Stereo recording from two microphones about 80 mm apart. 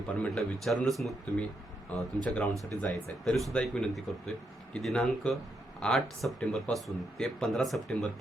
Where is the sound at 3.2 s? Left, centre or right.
Centre.